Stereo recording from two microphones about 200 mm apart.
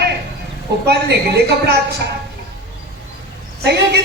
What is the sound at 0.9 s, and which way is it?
Speech, 55° right (ahead or behind).